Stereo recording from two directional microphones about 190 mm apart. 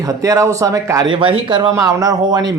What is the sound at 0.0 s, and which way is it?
A man's voice, 15° right (ahead or behind).